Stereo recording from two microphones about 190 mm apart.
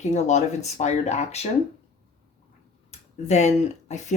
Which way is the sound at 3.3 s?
40° left (ahead or behind).